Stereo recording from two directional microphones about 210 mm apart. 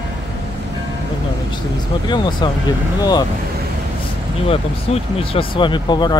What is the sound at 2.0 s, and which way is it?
Speech, 20° left (ahead or behind).